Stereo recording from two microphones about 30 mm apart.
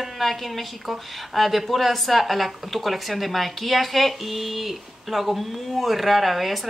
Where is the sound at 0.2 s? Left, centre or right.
Centre.